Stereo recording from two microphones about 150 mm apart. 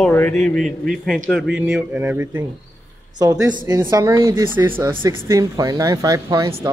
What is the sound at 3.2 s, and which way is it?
Speech, 25° right (ahead or behind).